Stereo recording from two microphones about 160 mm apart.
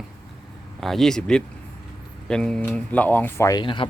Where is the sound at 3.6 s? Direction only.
30° left (ahead or behind).